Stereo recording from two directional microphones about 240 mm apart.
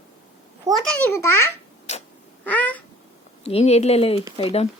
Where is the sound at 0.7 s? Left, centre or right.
Centre.